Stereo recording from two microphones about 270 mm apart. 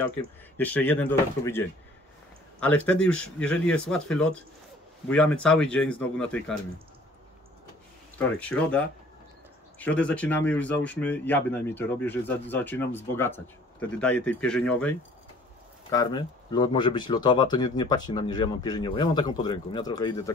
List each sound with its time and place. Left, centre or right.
0.6 s speech: centre
8.2 s speech: centre